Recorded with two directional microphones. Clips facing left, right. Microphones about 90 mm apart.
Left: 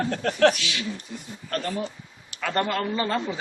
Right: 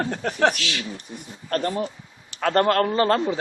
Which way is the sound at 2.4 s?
55° right (ahead or behind).